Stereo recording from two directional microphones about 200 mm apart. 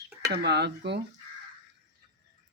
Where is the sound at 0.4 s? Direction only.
55° right (ahead or behind).